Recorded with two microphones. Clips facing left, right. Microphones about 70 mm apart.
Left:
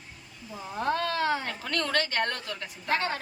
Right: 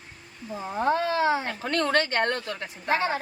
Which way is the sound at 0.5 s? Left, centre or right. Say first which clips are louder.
Right 4 dB; right.